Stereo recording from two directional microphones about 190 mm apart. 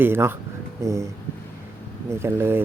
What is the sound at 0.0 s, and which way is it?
Speech, 10° right (ahead or behind).